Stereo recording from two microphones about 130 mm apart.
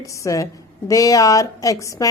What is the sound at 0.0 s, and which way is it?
A woman's voice, 25° left (ahead or behind).